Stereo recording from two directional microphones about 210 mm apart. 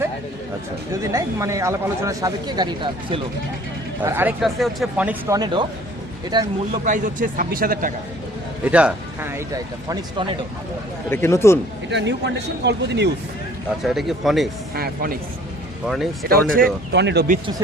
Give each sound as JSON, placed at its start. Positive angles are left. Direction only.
{"t": 1.1, "sound": "speech", "side_deg": -15}
{"t": 4.0, "sound": "speech", "side_deg": -10}
{"t": 6.8, "sound": "speech", "side_deg": -35}
{"t": 8.6, "sound": "speech", "side_deg": -5}
{"t": 11.1, "sound": "a man's voice", "side_deg": 10}
{"t": 11.9, "sound": "speech", "side_deg": -55}
{"t": 13.8, "sound": "speech", "side_deg": 0}
{"t": 14.8, "sound": "speech", "side_deg": -45}
{"t": 16.2, "sound": "speech", "side_deg": -45}